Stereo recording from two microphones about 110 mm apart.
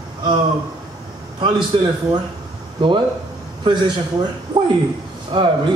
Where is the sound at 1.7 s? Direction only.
50° right (ahead or behind).